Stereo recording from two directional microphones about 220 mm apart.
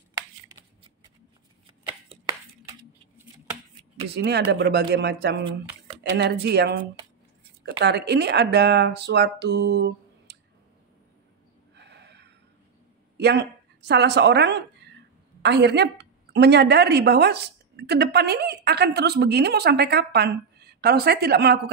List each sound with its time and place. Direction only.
4.1 s a woman's voice: 50° right (ahead or behind)
6.4 s a woman's voice: 50° right (ahead or behind)
11.7 s gasp: 50° right (ahead or behind)
13.2 s a woman's voice: 50° right (ahead or behind)
14.8 s cough: 50° right (ahead or behind)
15.4 s a woman's voice: 50° right (ahead or behind)